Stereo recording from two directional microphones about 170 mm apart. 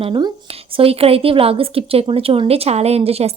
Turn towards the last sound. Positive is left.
turn(degrees=-35)  # may be behind; listen again after turning